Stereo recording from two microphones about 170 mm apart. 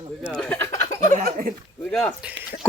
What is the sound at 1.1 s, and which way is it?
Speech, 60° right (ahead or behind).